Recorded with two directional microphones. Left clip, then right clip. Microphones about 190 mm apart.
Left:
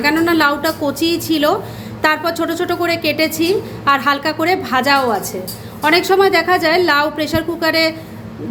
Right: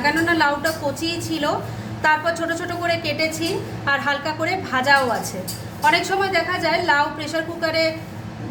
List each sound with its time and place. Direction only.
0.0 s a woman's voice: 45° left (ahead or behind)